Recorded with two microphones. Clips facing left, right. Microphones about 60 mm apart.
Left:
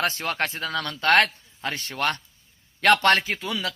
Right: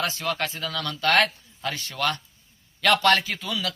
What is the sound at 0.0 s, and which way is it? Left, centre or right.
A man's voice, left.